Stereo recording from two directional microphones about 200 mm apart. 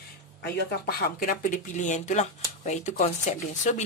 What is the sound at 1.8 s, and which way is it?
Speech, 40° left (ahead or behind).